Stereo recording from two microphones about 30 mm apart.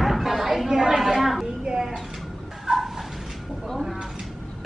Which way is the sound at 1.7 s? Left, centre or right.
Centre.